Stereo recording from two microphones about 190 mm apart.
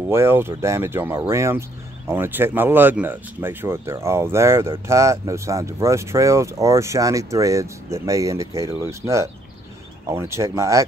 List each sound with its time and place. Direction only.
0.1 s speech: 15° right (ahead or behind)